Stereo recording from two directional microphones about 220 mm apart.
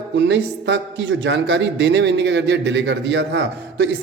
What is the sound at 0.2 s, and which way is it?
A man's voice, 55° right (ahead or behind).